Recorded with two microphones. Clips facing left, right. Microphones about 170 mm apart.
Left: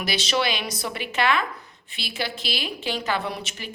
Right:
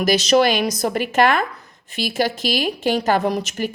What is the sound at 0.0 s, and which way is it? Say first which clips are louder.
A woman's voice: right 10 dB; 40° right (ahead or behind).